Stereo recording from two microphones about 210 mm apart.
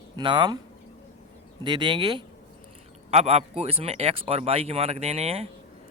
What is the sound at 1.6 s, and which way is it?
Speech, 20° right (ahead or behind).